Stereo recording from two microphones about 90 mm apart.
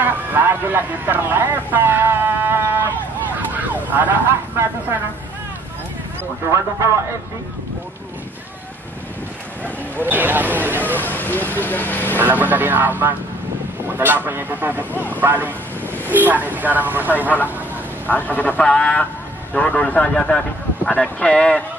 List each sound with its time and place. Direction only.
0.0 s speech: 20° right (ahead or behind)
3.3 s emergency vehicle: 20° right (ahead or behind)
9.9 s speech: 20° right (ahead or behind)
11.0 s speech: 20° left (ahead or behind)
12.2 s speech: 20° right (ahead or behind)
18.0 s speech: 20° left (ahead or behind)